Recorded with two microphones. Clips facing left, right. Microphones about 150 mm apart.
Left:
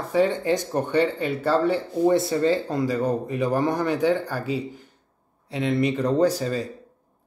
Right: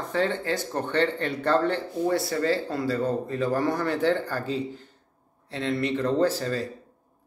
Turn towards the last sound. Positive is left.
turn(degrees=15)  # may be behind; listen again after turning